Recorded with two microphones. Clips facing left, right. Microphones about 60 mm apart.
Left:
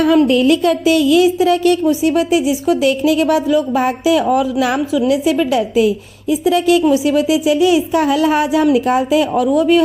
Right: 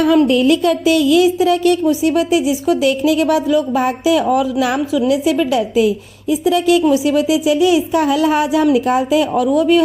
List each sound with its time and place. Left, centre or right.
0.3 s speech: left
1.4 s speech: left
1.9 s speech: left
2.8 s speech: left
9.4 s speech: left